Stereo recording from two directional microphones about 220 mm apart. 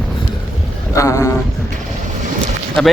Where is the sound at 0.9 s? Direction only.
15° left (ahead or behind).